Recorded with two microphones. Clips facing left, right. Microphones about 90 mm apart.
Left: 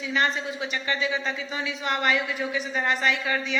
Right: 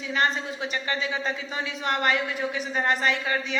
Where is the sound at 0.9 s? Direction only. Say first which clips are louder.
Left 2 dB; 40° right (ahead or behind).